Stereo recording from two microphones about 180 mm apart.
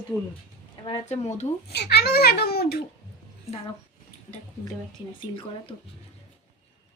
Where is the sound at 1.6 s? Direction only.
65° left (ahead or behind).